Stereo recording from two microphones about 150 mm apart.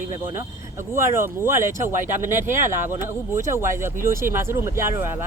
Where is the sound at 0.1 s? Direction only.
15° right (ahead or behind).